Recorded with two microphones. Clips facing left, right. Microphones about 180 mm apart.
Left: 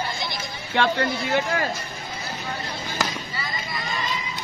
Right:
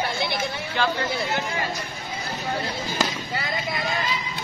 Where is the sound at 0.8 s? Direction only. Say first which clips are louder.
Left 3 dB; 65° left (ahead or behind).